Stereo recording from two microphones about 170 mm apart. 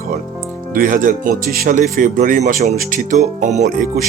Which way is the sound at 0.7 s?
55° right (ahead or behind).